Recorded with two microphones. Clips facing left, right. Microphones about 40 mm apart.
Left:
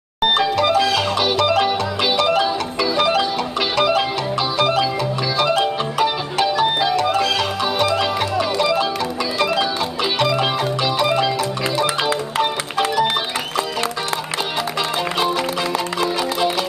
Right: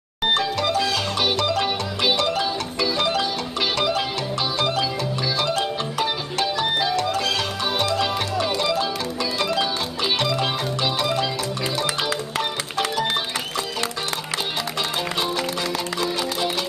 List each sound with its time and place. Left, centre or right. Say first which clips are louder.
0.4 s music: left 6 dB; centre
1.2 s music: left 2 dB; centre
2.3 s music: left 5 dB; centre
10.1 s music: left 5 dB; centre
12.4 s music: left 5 dB; centre
16.0 s music: left 5 dB; left